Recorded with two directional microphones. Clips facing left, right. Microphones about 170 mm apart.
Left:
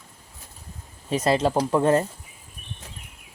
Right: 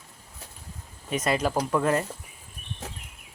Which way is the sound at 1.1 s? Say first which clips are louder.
Left 4 dB; 30° left (ahead or behind).